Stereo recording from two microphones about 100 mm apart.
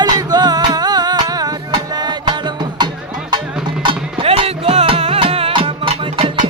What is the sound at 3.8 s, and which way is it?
Music, 70° right (ahead or behind).